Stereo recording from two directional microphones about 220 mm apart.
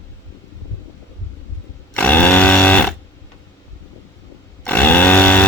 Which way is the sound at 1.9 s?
5° left (ahead or behind).